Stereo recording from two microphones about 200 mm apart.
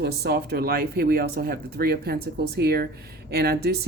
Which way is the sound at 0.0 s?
55° right (ahead or behind).